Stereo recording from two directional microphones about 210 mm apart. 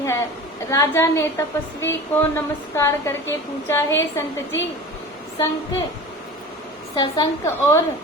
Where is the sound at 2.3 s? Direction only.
15° left (ahead or behind).